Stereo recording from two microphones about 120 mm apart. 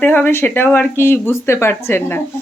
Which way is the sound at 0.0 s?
10° left (ahead or behind).